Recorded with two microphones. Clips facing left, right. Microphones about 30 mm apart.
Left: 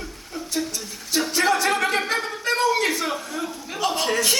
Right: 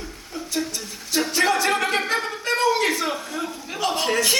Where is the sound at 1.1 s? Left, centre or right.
Centre.